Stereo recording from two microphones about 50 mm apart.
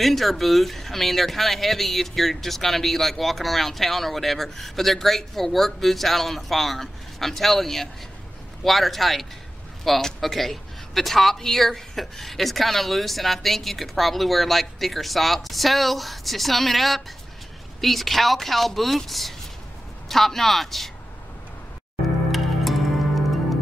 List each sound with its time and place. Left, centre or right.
0.0 s speech: centre
22.3 s music: centre